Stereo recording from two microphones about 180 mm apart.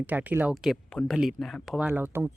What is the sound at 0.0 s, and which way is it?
Speech, 10° right (ahead or behind).